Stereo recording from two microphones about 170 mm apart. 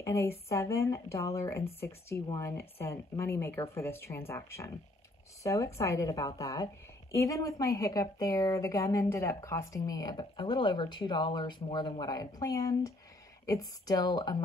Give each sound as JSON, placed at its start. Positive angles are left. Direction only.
{"t": 0.0, "sound": "a woman's voice", "side_deg": 15}